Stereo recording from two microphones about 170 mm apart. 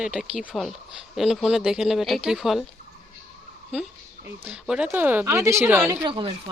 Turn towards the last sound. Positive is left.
turn(degrees=-30)  # may be behind; listen again after turning